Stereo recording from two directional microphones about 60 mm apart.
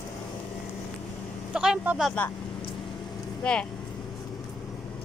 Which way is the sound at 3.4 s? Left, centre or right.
Centre.